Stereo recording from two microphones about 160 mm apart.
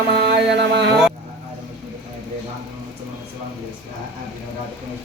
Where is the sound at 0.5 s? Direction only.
90° right.